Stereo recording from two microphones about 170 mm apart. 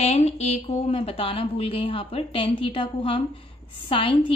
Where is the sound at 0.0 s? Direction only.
40° left (ahead or behind).